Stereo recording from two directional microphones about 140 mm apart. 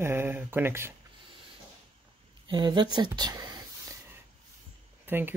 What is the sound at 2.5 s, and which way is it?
Speech, 30° right (ahead or behind).